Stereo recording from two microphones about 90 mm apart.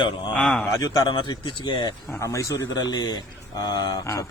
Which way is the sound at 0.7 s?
45° left (ahead or behind).